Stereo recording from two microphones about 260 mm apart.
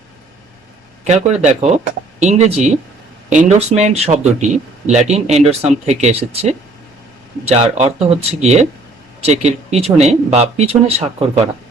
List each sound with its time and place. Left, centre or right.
1.0 s speech: right